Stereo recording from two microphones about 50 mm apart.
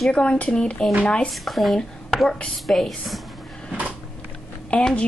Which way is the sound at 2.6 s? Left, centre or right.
Centre.